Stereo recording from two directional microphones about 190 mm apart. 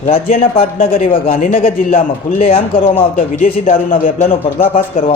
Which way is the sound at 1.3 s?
40° left (ahead or behind).